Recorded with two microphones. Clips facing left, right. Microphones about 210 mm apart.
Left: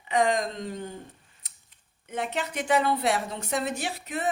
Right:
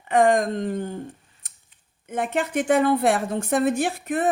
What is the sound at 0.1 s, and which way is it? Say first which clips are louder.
Speech: right 6 dB; 50° right (ahead or behind).